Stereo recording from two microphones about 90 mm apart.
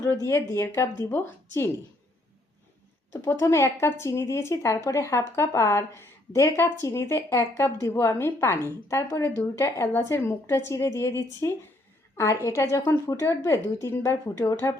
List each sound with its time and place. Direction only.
0.2 s a woman's voice: 30° left (ahead or behind)
3.1 s a woman's voice: 30° left (ahead or behind)